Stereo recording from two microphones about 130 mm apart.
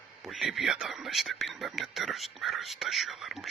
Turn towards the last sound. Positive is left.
turn(degrees=0)  # may be behind; listen again after turning